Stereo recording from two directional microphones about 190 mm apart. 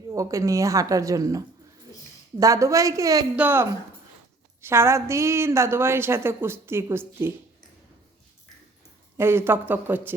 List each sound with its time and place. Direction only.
0.1 s a woman's voice: 15° right (ahead or behind)
9.1 s a woman's voice: 10° right (ahead or behind)